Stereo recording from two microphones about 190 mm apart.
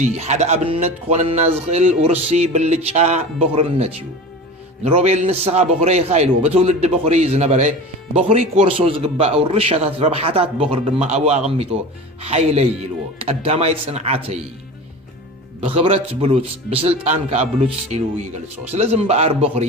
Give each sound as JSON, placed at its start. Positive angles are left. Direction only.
{"t": 0.0, "sound": "music", "side_deg": -35}
{"t": 15.6, "sound": "music", "side_deg": -30}